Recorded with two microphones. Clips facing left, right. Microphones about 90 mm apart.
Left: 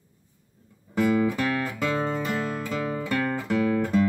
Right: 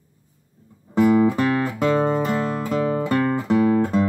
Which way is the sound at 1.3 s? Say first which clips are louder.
Right 6 dB; 35° right (ahead or behind).